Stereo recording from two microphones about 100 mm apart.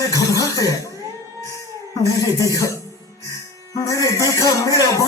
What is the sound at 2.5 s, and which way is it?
Speech, 35° left (ahead or behind).